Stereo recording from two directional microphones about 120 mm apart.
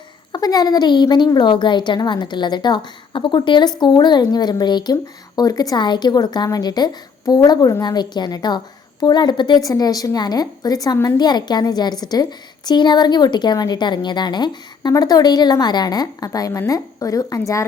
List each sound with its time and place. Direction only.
0.3 s a woman's voice: 35° left (ahead or behind)